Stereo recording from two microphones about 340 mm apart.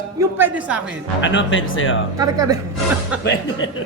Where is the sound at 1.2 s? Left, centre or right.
Left.